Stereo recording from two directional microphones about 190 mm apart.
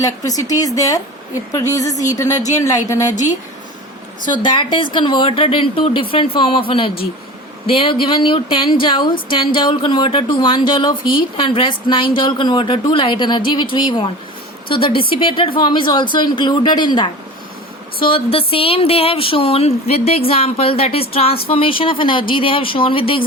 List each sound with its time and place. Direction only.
0.0 s speech: 20° left (ahead or behind)
3.1 s speech: 40° left (ahead or behind)
4.3 s speech: 25° left (ahead or behind)